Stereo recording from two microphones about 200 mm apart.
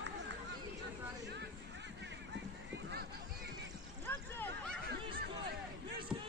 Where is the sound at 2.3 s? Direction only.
60° right (ahead or behind).